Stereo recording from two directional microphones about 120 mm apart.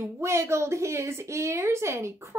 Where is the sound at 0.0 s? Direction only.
25° right (ahead or behind).